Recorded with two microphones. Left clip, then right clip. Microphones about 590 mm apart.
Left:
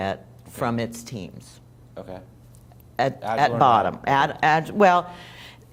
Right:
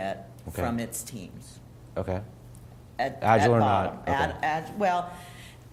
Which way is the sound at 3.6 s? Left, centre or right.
Left.